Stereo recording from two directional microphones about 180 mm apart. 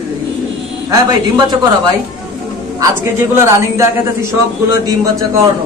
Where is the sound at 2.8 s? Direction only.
15° right (ahead or behind).